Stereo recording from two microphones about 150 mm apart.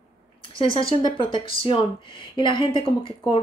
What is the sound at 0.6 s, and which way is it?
Speech, 35° left (ahead or behind).